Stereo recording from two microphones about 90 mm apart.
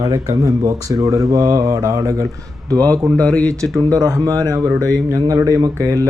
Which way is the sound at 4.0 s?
40° right (ahead or behind).